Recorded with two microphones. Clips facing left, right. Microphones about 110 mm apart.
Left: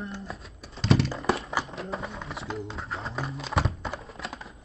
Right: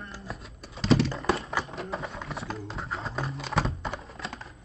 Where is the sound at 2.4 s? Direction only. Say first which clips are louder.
Left 1 dB; centre (ahead or behind).